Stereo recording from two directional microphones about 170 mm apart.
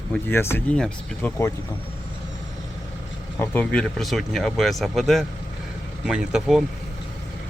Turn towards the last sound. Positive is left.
turn(degrees=-5)  # may be behind; listen again after turning